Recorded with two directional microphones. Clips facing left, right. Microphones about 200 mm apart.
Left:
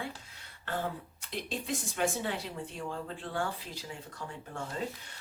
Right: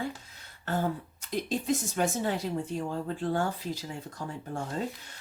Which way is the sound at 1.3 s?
40° right (ahead or behind).